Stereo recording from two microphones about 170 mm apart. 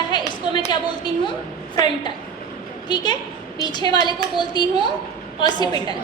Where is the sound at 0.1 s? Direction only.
25° left (ahead or behind).